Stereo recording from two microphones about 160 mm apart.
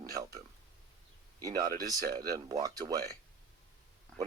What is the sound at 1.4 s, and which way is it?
Speech, 20° right (ahead or behind).